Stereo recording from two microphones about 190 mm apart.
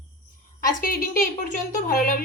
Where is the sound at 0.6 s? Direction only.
50° left (ahead or behind).